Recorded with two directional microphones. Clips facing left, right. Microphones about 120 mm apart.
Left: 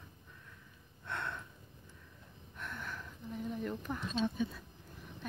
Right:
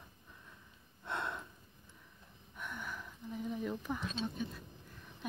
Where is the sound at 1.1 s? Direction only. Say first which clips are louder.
Right 1 dB; 20° right (ahead or behind).